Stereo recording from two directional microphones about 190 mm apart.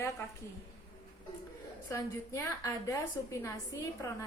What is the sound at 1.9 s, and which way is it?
A woman's voice, 15° left (ahead or behind).